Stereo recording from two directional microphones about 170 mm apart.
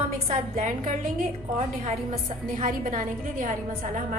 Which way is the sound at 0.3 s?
45° right (ahead or behind).